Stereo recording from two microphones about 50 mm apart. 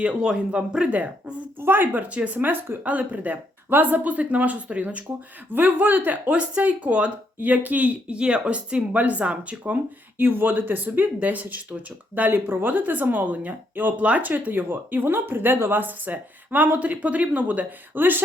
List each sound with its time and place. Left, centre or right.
0.0 s speech: right
1.5 s speech: right
5.5 s speech: right
6.6 s speech: right
10.2 s speech: right